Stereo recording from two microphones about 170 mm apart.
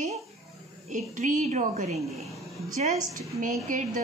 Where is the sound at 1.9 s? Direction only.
Centre (ahead or behind).